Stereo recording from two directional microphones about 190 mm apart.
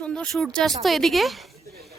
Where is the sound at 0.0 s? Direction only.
5° left (ahead or behind).